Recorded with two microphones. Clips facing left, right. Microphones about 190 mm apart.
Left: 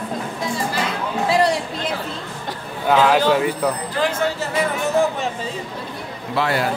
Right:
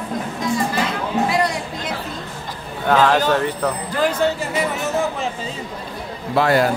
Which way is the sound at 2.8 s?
5° left (ahead or behind).